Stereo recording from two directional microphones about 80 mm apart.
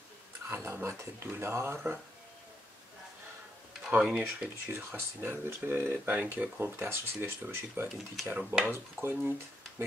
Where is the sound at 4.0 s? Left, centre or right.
Centre.